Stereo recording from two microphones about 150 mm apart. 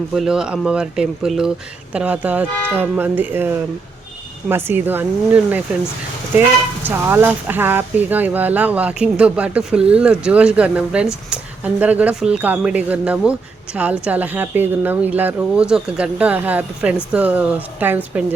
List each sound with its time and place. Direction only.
0.1 s a woman's voice: 5° right (ahead or behind)
6.8 s a woman's voice: 15° right (ahead or behind)